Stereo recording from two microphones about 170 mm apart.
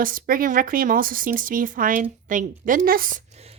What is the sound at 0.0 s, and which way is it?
A woman's voice, 55° right (ahead or behind).